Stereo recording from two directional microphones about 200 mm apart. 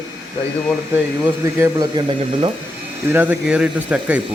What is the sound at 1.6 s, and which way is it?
Speech, 20° right (ahead or behind).